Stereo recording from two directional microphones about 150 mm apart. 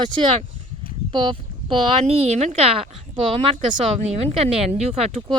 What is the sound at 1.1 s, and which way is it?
Speech, 35° right (ahead or behind).